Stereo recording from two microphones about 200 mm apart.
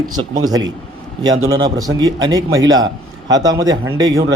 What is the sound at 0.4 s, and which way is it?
A man's voice, 20° right (ahead or behind).